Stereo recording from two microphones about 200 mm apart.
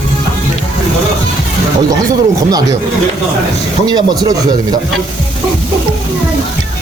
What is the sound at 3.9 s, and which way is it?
Speech, 20° right (ahead or behind).